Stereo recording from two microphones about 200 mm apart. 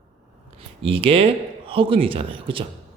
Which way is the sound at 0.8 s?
30° right (ahead or behind).